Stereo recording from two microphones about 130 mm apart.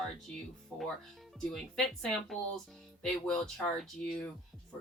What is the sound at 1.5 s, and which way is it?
A woman's voice, centre (ahead or behind).